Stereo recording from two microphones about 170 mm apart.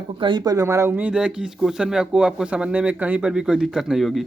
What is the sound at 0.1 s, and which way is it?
Speech, 30° right (ahead or behind).